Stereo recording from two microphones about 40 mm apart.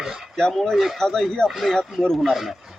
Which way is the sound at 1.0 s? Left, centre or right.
Centre.